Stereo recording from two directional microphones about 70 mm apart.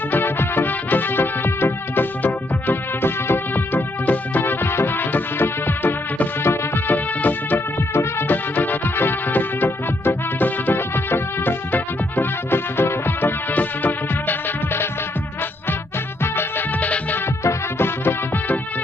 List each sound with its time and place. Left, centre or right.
0.1 s music: left
16.2 s music: left